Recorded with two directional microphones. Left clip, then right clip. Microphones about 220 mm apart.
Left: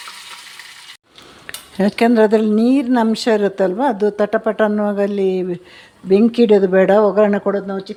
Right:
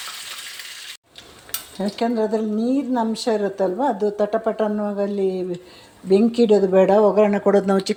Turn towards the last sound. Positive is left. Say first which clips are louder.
# right 3 dB
turn(degrees=-15)  # may be behind; listen again after turning